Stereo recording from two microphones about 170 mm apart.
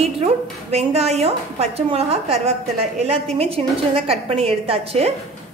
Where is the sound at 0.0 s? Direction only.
35° right (ahead or behind).